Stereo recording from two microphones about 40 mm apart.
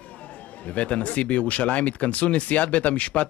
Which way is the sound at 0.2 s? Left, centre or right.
Left.